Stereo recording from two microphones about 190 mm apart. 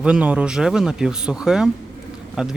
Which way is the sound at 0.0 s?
5° right (ahead or behind).